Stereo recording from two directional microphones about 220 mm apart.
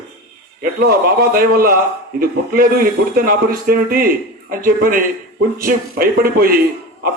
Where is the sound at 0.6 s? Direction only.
45° right (ahead or behind).